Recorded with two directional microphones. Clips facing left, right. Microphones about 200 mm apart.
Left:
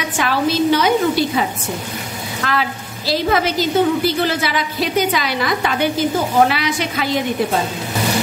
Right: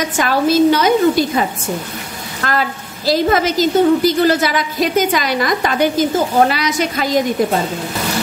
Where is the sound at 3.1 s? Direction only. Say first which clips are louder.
Right 3 dB; 45° right (ahead or behind).